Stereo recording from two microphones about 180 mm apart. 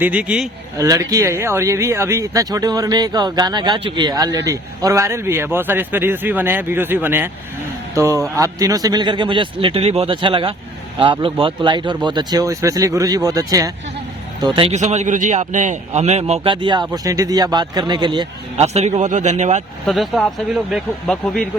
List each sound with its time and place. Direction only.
0.0 s speech: 5° right (ahead or behind)
0.8 s a man's voice: 20° right (ahead or behind)
14.4 s a man's voice: 30° right (ahead or behind)
18.5 s speech: 35° right (ahead or behind)
19.9 s speech: centre (ahead or behind)